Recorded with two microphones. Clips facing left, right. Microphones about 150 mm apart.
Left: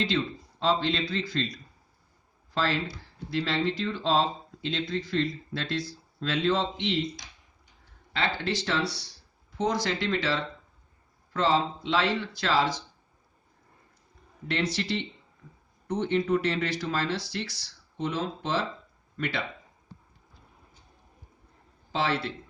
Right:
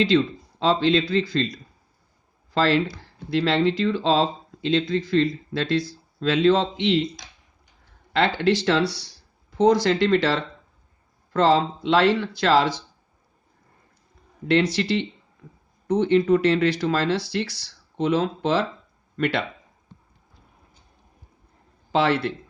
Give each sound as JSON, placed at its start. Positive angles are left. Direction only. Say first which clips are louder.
{"t": 0.1, "sound": "speech", "louder": "right 9 dB", "side_deg": -90}
{"t": 2.6, "sound": "speech", "louder": "right 8 dB", "side_deg": -85}
{"t": 8.1, "sound": "speech", "louder": "right 9 dB", "side_deg": -70}
{"t": 11.3, "sound": "speech", "louder": "right 6 dB", "side_deg": -75}
{"t": 14.4, "sound": "speech", "louder": "right 9 dB", "side_deg": -90}
{"t": 21.9, "sound": "speech", "louder": "right 7 dB", "side_deg": -65}